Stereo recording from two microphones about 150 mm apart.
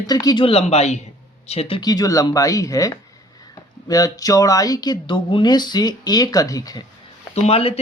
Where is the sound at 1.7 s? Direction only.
25° left (ahead or behind).